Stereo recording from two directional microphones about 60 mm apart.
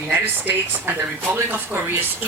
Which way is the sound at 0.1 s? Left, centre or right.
Right.